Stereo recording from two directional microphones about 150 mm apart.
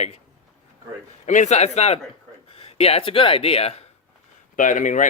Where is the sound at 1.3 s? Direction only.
55° left (ahead or behind).